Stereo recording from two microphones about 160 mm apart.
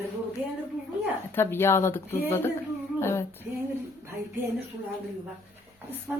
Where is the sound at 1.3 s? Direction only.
15° left (ahead or behind).